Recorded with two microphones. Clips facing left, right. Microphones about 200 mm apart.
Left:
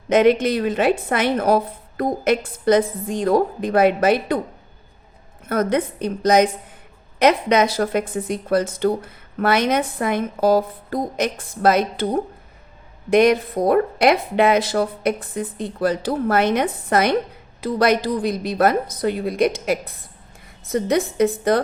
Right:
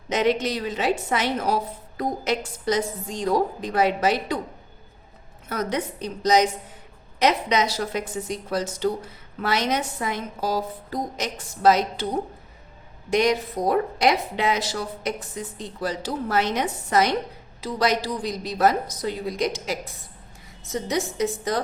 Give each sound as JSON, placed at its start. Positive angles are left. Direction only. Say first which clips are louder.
{"t": 0.1, "sound": "speech", "louder": "left 7 dB", "side_deg": 55}
{"t": 5.5, "sound": "speech", "louder": "left 7 dB", "side_deg": 55}
{"t": 13.1, "sound": "speech", "louder": "left 6 dB", "side_deg": 55}